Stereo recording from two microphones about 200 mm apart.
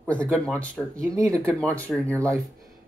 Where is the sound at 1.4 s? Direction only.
5° left (ahead or behind).